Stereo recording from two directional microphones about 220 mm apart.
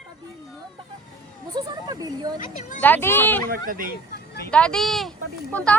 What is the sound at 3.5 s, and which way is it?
Speech, 40° right (ahead or behind).